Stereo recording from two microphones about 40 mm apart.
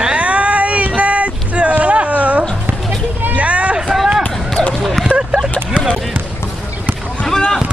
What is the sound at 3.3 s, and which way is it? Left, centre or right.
Vehicle, right.